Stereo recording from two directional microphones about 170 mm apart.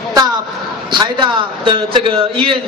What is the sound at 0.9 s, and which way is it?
A man's voice, 30° right (ahead or behind).